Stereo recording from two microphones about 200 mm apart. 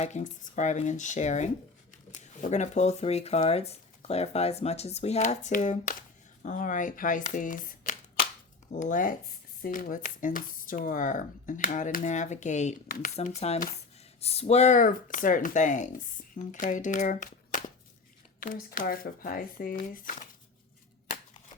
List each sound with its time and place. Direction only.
0.0 s speech: 35° left (ahead or behind)